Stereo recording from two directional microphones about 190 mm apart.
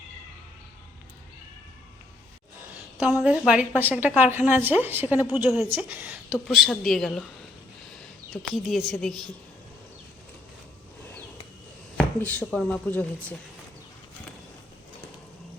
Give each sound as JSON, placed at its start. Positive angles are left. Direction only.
{"t": 3.2, "sound": "a woman's voice", "side_deg": -5}
{"t": 8.3, "sound": "a woman's voice", "side_deg": 0}
{"t": 11.9, "sound": "speech", "side_deg": 5}